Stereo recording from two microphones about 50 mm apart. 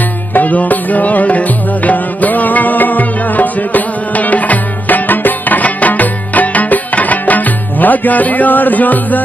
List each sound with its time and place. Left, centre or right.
0.3 s music: left